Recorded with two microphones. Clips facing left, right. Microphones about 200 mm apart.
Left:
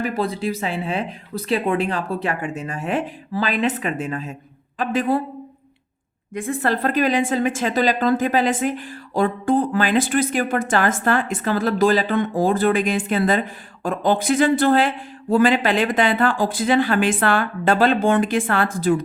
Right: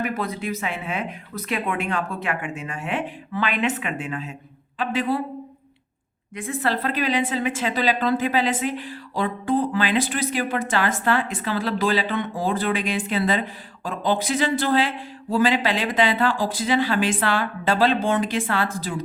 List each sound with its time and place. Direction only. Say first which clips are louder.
0.0 s a woman's voice: left 4 dB; 30° left (ahead or behind); by 5.2 s 50° left (ahead or behind)
6.6 s a woman's voice: left 4 dB; 45° left (ahead or behind)